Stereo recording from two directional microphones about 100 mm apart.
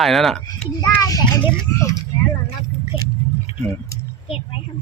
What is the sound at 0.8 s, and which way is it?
Speech, 35° left (ahead or behind).